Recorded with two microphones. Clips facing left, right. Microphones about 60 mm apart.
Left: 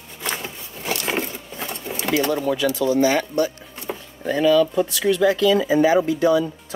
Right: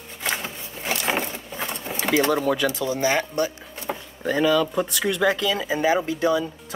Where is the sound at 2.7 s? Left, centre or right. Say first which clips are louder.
Left 5 dB; right.